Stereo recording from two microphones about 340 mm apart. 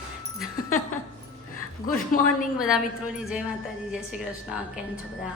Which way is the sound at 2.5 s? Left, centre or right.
Centre.